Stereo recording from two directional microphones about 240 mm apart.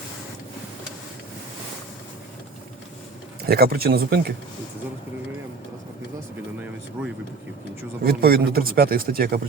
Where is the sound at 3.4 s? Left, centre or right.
Right.